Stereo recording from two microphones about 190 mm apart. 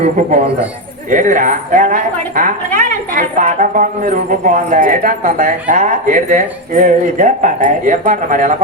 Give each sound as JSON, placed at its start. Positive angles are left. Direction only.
{"t": 0.0, "sound": "a man's voice", "side_deg": -35}